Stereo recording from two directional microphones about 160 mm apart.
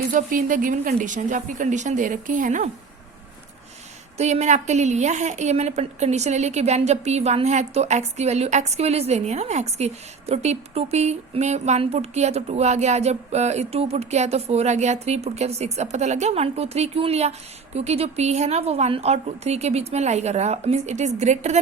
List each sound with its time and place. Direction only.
0.1 s a woman's voice: 55° right (ahead or behind)
4.2 s a woman's voice: 45° right (ahead or behind)